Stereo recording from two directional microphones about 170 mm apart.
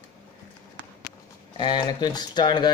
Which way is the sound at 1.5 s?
25° left (ahead or behind).